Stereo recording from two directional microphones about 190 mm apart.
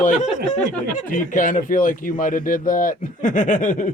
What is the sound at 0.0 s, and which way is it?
A man's voice, 40° left (ahead or behind).